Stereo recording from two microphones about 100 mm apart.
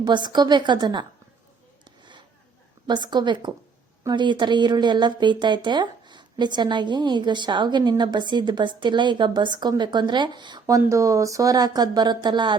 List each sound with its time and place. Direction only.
0.0 s speech: 45° right (ahead or behind)
2.8 s speech: 45° right (ahead or behind)
10.8 s speech: 30° right (ahead or behind); by 12.5 s 50° right (ahead or behind)